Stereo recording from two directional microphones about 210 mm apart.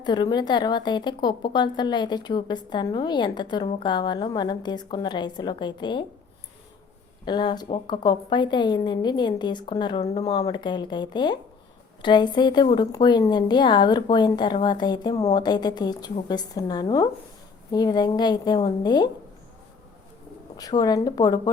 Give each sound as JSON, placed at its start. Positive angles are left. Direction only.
{"t": 0.0, "sound": "a woman's voice", "side_deg": 20}
{"t": 7.3, "sound": "a woman's voice", "side_deg": 20}
{"t": 20.6, "sound": "a woman's voice", "side_deg": 20}